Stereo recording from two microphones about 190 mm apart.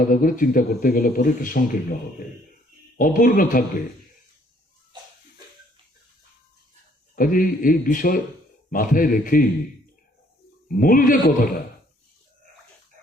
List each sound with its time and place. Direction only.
0.1 s a man's voice: 45° left (ahead or behind)
7.2 s a man's voice: 45° left (ahead or behind)
10.7 s a man's voice: 45° left (ahead or behind)